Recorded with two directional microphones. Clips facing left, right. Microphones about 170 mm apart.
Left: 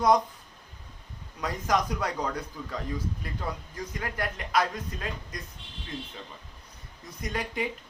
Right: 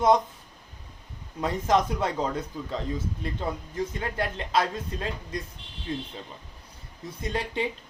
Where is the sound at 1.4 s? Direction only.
25° right (ahead or behind).